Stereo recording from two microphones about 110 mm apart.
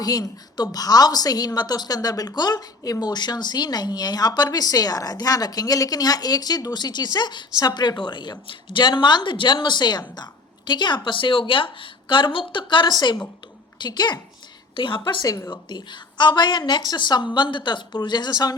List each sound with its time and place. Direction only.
0.0 s a woman's voice: 35° left (ahead or behind)
15.2 s speech: 25° left (ahead or behind)
15.4 s a woman's voice: 40° left (ahead or behind)